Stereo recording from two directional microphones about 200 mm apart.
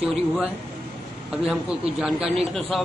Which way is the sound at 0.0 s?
10° right (ahead or behind).